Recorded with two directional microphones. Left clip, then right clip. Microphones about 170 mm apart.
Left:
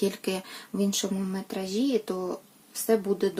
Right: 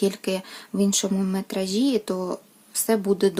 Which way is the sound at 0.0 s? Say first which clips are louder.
Right 4 dB; 20° right (ahead or behind).